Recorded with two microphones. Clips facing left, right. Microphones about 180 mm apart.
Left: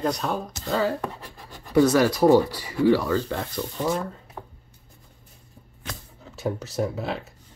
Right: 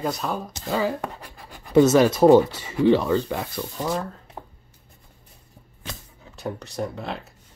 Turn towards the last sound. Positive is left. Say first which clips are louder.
# left 3 dB
turn(degrees=0)  # may be behind; listen again after turning